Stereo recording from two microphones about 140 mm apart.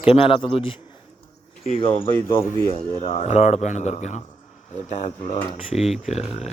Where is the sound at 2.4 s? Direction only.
20° left (ahead or behind).